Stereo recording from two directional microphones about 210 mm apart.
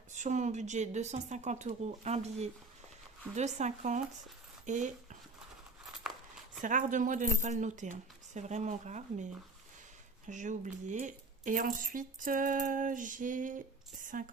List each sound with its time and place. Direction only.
0.1 s speech: 35° right (ahead or behind)
6.6 s speech: 40° right (ahead or behind)